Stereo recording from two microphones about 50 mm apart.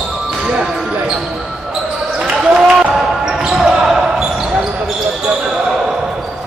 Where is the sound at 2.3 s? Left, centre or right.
Centre.